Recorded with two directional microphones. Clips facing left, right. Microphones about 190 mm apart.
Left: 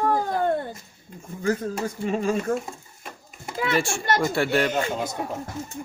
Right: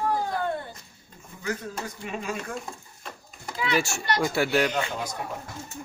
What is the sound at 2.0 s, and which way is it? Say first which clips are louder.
Speech: left 9 dB; 35° left (ahead or behind).